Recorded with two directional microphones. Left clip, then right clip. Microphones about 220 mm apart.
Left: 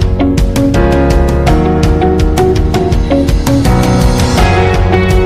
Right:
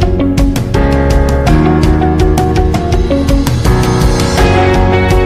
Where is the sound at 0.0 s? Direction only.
Centre (ahead or behind).